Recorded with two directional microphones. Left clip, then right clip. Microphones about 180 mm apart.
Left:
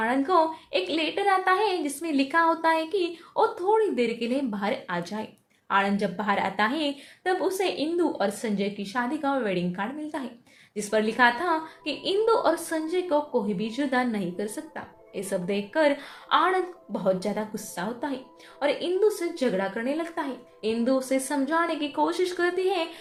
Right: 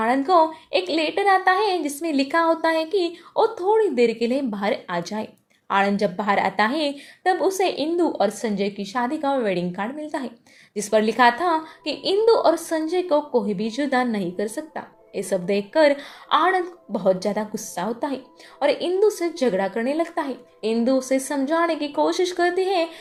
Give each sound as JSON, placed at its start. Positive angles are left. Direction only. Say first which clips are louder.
{"t": 0.0, "sound": "a woman's voice", "louder": "right 5 dB", "side_deg": -35}